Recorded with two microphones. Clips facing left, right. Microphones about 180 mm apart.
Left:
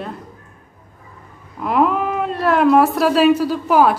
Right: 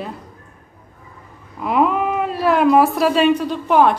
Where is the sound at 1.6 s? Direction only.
Centre (ahead or behind).